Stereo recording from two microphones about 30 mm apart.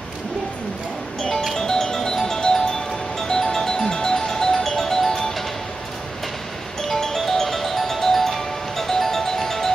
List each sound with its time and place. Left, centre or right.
1.6 s music: centre
6.9 s music: centre